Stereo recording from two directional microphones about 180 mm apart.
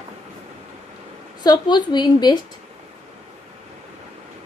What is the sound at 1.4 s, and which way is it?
Speech, 25° left (ahead or behind).